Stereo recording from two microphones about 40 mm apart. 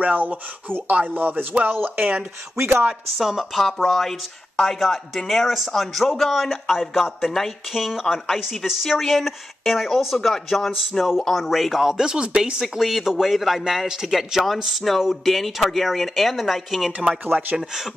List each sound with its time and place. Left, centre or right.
0.0 s speech: right
1.5 s speech: right
3.2 s a man's voice: centre
12.1 s speech: right
12.6 s a man's voice: centre
14.7 s a man's voice: centre